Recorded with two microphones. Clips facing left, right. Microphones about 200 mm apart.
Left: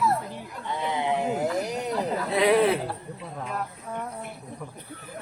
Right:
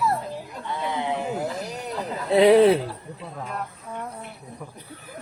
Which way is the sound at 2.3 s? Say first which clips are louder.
Right 6 dB; 30° right (ahead or behind).